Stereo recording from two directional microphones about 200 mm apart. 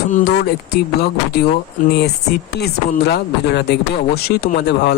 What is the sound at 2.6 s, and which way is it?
Speech, 55° left (ahead or behind).